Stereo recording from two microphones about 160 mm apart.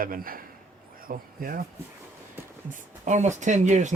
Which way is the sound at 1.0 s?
60° right (ahead or behind).